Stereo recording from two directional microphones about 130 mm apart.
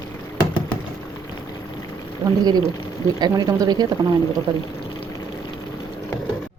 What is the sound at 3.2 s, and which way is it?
Speech, 30° right (ahead or behind).